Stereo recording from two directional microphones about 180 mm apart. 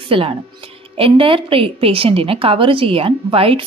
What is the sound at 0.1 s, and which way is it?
A woman's voice, 30° right (ahead or behind).